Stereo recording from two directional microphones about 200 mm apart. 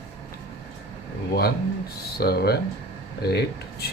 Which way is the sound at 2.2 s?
55° left (ahead or behind).